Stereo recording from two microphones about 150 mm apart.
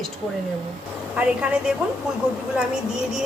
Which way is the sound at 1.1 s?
10° right (ahead or behind).